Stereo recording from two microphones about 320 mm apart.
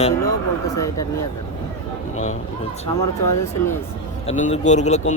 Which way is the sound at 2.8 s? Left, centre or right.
Centre.